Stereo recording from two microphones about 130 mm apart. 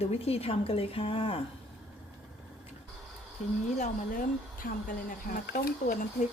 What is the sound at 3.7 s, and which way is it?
Speech, 80° left.